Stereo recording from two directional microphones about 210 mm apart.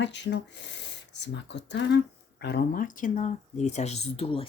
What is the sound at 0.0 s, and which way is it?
Speech, 55° left (ahead or behind).